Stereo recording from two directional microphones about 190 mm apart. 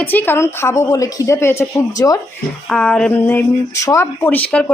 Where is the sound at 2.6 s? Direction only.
5° left (ahead or behind).